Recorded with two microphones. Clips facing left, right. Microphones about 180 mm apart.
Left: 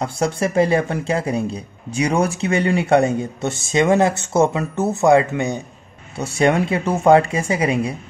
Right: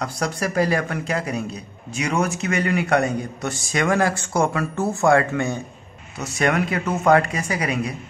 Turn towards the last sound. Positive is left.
turn(degrees=25)  # may be behind; listen again after turning